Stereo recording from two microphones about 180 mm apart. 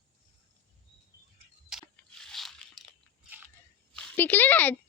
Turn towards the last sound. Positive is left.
turn(degrees=10)  # may be behind; listen again after turning